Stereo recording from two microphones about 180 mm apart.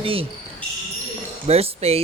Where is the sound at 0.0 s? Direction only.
30° right (ahead or behind).